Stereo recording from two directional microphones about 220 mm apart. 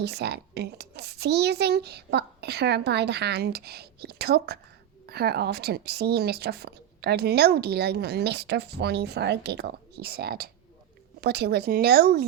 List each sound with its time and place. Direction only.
0.0 s a woman's voice: 50° right (ahead or behind)